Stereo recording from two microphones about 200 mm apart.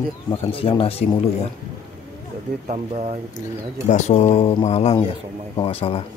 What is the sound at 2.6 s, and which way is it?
Speech, 30° right (ahead or behind).